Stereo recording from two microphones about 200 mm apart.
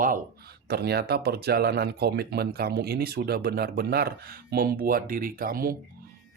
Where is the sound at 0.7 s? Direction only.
55° right (ahead or behind).